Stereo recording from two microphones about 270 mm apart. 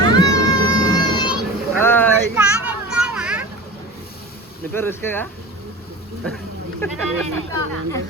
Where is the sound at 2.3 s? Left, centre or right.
Centre.